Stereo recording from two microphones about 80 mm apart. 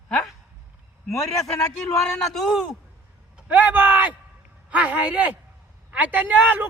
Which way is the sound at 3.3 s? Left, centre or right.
Centre.